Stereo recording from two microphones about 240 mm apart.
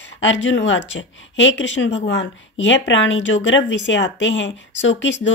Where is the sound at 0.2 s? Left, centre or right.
Left.